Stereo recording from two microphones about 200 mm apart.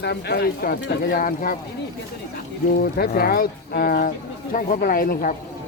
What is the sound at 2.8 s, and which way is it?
A man's voice, 50° left (ahead or behind).